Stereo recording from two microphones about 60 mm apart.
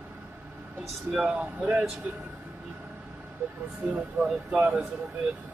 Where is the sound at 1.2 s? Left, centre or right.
Right.